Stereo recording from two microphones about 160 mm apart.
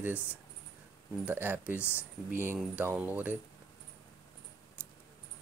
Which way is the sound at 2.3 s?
15° right (ahead or behind).